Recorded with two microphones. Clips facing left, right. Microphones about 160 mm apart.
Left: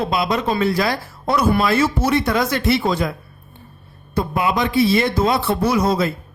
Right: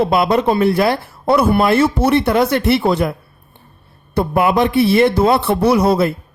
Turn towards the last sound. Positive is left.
turn(degrees=-65)  # may be behind; listen again after turning